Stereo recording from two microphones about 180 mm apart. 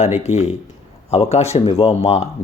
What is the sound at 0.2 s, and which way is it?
Speech, 40° left (ahead or behind).